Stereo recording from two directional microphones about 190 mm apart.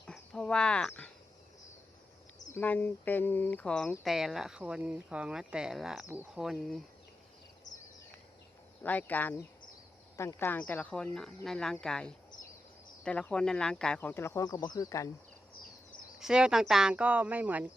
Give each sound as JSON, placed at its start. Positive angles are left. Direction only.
{"t": 0.0, "sound": "a sound", "side_deg": 5}
{"t": 2.5, "sound": "speech", "side_deg": 10}
{"t": 8.8, "sound": "speech", "side_deg": 10}
{"t": 16.2, "sound": "speech", "side_deg": -5}